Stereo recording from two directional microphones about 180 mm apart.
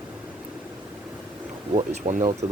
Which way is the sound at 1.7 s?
35° right (ahead or behind).